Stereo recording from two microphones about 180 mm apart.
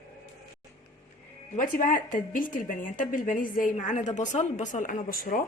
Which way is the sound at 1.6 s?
50° left (ahead or behind).